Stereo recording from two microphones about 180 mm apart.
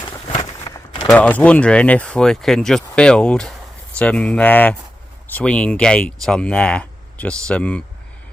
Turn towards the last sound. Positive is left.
turn(degrees=5)  # may be behind; listen again after turning